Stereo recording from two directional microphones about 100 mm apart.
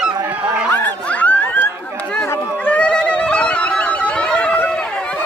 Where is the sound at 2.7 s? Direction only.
10° left (ahead or behind).